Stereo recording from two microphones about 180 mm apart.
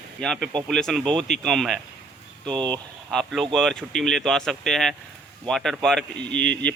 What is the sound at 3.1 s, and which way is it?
A man's voice, centre (ahead or behind).